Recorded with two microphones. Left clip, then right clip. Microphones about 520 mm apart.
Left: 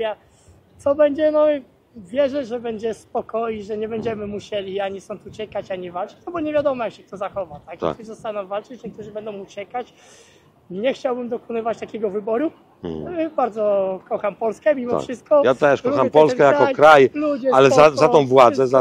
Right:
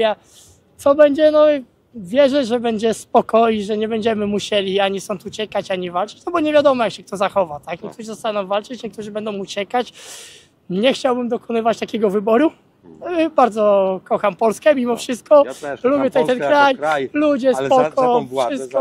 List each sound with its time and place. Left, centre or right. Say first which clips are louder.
0.8 s speech: right 5 dB; right
15.4 s speech: left 10 dB; left
16.8 s speech: left 9 dB; left
17.1 s speech: right 4 dB; right
17.6 s speech: left 3 dB; left